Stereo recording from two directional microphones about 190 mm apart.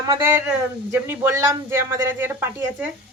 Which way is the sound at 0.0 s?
15° right (ahead or behind).